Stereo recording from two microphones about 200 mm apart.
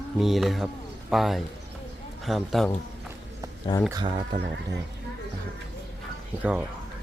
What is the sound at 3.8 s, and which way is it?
Speech, 20° right (ahead or behind).